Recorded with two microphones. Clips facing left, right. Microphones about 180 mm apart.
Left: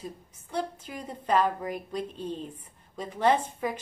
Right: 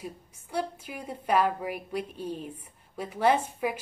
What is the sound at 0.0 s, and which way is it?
A woman's voice, 10° right (ahead or behind).